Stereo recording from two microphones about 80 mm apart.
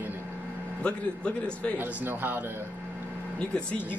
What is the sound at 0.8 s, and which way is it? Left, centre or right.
Speech, centre.